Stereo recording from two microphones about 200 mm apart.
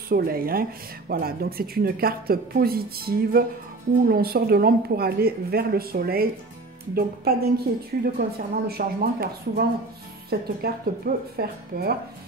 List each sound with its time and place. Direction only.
0.1 s speech: 50° right (ahead or behind)